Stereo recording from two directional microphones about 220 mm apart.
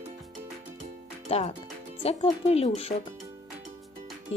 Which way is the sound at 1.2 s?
30° left (ahead or behind).